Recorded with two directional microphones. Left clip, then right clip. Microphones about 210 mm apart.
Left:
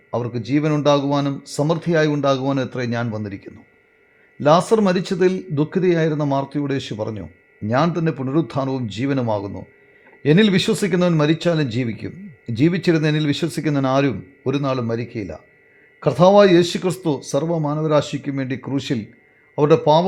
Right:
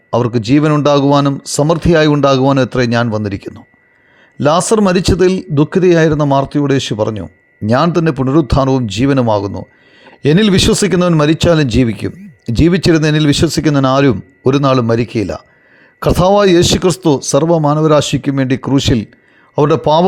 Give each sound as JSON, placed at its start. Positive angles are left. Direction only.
{"t": 0.1, "sound": "speech", "side_deg": -35}